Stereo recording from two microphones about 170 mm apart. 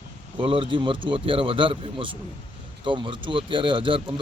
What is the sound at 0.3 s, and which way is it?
A man's voice, 30° right (ahead or behind).